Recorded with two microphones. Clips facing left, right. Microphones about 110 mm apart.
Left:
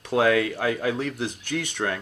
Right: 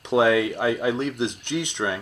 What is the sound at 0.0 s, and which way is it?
Speech, 20° right (ahead or behind).